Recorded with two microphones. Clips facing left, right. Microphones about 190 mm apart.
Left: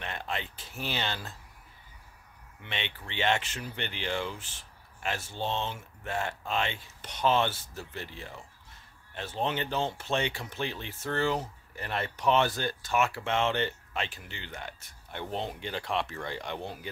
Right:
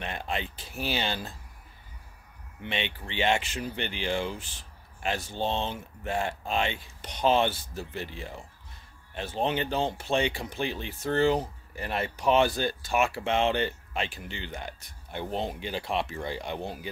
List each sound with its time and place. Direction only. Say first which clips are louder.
0.0 s speech: right 3 dB; 15° right (ahead or behind)
2.6 s speech: right 5 dB; 15° right (ahead or behind)
5.5 s speech: right 1 dB; 30° right (ahead or behind)
6.0 s speech: right 3 dB; 15° right (ahead or behind)